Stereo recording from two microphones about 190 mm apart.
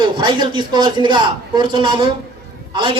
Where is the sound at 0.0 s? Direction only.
25° right (ahead or behind).